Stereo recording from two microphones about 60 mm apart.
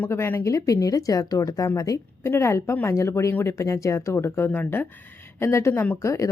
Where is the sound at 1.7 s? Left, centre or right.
Left.